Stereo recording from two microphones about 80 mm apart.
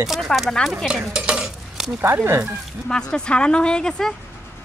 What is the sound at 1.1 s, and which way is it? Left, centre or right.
Dishes, centre.